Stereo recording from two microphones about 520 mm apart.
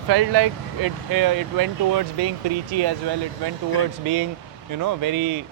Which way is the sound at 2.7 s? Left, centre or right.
Right.